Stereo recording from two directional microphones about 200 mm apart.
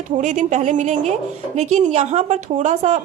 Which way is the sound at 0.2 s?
40° right (ahead or behind).